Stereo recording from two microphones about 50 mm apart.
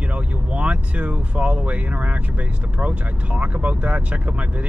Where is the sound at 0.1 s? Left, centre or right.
Right.